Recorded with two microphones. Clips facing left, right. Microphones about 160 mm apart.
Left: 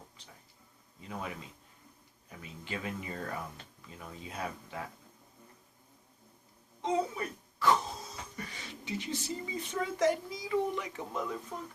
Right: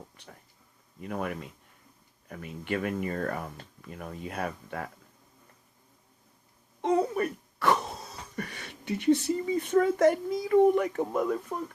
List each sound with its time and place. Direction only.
0.2 s speech: 65° right (ahead or behind)
6.8 s speech: 60° right (ahead or behind)